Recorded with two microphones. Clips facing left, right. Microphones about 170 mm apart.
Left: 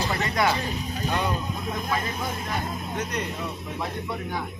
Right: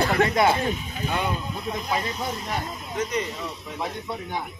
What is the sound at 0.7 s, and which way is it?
Speech, 40° left (ahead or behind).